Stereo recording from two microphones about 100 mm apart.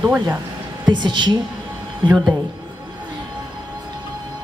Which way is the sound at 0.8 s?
50° right (ahead or behind).